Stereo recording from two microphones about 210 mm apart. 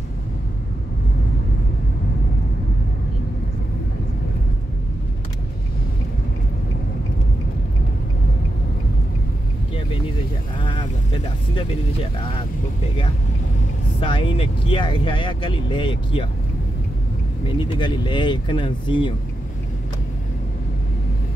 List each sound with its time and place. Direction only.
10.6 s vehicle: 25° left (ahead or behind)
13.9 s speech: 25° left (ahead or behind)
17.6 s speech: 20° left (ahead or behind)